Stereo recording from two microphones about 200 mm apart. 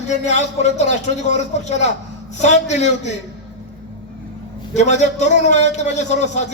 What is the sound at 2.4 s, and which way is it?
Speech, 35° left (ahead or behind).